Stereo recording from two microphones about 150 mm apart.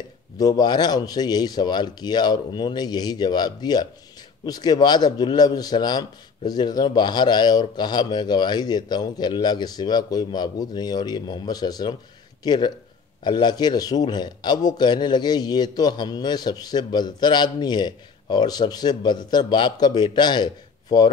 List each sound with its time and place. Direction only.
0.4 s a man's voice: 25° left (ahead or behind)